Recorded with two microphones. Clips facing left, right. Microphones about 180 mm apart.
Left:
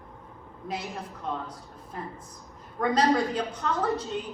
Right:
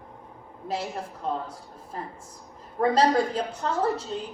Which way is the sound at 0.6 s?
30° right (ahead or behind).